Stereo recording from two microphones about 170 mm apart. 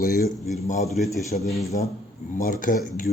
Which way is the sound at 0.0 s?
60° left (ahead or behind).